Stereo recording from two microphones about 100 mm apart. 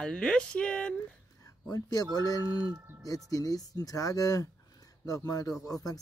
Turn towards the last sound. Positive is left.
turn(degrees=35)  # may be behind; listen again after turning